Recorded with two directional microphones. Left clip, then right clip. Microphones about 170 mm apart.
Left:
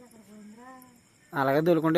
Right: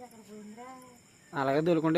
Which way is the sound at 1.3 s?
35° left (ahead or behind).